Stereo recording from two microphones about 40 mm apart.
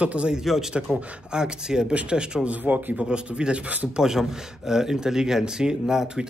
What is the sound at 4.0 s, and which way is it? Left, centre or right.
Speech, centre.